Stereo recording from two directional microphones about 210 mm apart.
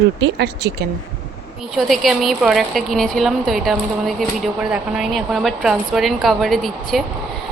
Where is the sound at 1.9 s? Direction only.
Centre (ahead or behind).